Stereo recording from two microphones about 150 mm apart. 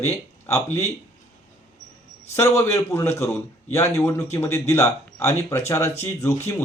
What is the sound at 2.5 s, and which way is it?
Speech, 45° left (ahead or behind).